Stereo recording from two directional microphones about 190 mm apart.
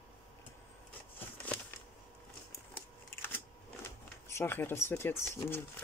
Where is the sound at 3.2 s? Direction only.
10° left (ahead or behind).